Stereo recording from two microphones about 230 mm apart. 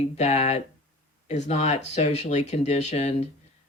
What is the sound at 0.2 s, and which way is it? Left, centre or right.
Speech, left.